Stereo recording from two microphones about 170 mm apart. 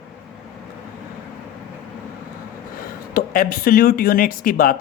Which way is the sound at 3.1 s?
55° left (ahead or behind).